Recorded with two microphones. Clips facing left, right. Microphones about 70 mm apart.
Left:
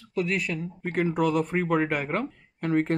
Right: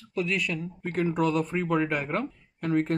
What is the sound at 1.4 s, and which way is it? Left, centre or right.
Speech, left.